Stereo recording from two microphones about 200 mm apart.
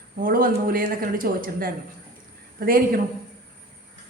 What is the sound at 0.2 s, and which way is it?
A woman's voice, 45° right (ahead or behind).